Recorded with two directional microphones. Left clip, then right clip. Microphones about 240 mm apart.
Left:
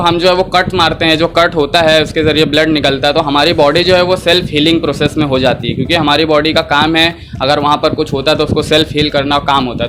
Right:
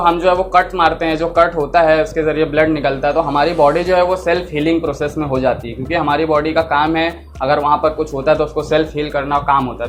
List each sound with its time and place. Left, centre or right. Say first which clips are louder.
0.0 s speech: left 3 dB; left